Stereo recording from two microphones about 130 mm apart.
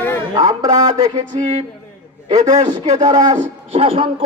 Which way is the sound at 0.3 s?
30° right (ahead or behind).